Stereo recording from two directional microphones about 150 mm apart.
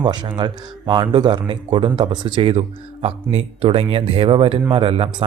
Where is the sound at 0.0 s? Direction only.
30° right (ahead or behind).